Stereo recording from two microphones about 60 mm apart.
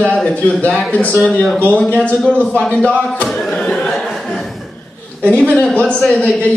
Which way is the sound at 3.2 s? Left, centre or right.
Centre.